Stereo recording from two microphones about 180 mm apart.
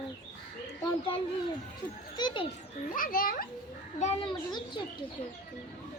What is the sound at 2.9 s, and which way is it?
Speech, 50° left (ahead or behind).